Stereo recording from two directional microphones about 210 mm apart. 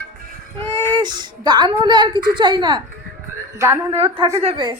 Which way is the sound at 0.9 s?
20° right (ahead or behind).